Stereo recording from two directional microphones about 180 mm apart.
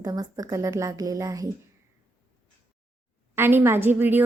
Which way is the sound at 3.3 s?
10° right (ahead or behind).